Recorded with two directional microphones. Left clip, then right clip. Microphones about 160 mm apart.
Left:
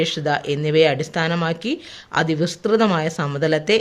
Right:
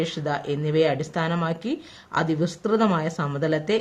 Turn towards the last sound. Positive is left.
turn(degrees=25)  # may be behind; listen again after turning